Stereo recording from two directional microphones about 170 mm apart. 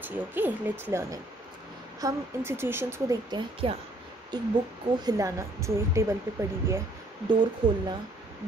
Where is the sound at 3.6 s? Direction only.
30° right (ahead or behind).